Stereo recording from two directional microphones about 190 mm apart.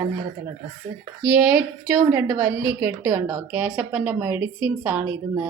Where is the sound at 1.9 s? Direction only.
10° right (ahead or behind).